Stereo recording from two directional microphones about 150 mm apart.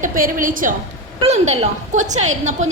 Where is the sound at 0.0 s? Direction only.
65° right (ahead or behind).